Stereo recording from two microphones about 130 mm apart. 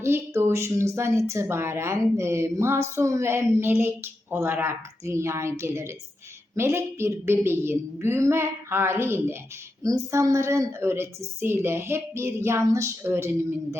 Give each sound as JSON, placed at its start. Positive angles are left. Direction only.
{"t": 0.0, "sound": "a woman's voice", "side_deg": -20}